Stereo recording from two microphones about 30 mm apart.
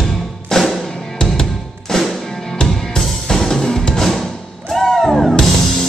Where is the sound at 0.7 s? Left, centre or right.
Centre.